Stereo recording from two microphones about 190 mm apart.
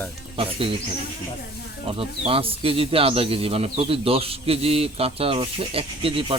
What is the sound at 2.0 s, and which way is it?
Speech, 30° right (ahead or behind).